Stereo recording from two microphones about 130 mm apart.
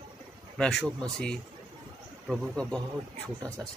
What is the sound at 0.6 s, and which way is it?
Speech, 5° left (ahead or behind).